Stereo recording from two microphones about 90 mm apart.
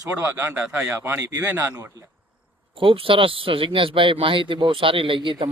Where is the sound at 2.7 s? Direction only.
80° right.